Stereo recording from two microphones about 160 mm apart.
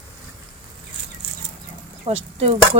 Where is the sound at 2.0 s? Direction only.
40° right (ahead or behind).